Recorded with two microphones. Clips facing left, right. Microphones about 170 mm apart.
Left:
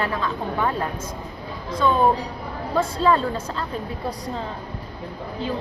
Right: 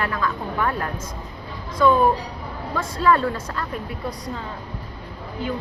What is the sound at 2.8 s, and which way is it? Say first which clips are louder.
Speech: even; 25° left (ahead or behind).